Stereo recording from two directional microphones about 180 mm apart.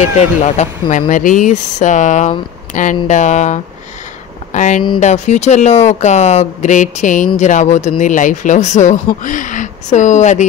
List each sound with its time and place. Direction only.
0.0 s speech: 40° left (ahead or behind)